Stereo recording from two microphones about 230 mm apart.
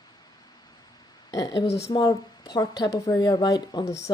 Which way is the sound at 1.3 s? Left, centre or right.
Centre.